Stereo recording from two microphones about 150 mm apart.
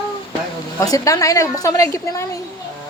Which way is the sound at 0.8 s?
25° left (ahead or behind).